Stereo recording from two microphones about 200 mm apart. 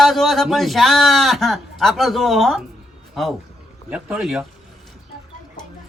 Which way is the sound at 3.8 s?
5° right (ahead or behind).